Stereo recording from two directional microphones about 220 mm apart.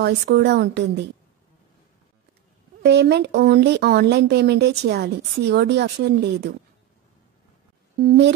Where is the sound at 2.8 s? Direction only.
50° right (ahead or behind).